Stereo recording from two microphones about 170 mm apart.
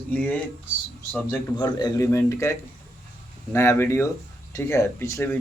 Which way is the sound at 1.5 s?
25° left (ahead or behind).